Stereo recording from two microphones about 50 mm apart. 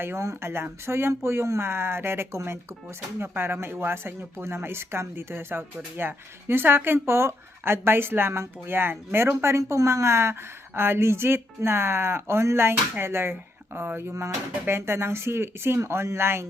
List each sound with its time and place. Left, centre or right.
0.2 s speech: right
3.2 s speech: right
7.0 s speech: right
10.8 s speech: right